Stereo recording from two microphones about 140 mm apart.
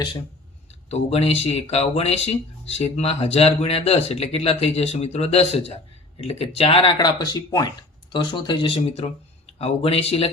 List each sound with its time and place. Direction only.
0.7 s speech: 50° left (ahead or behind)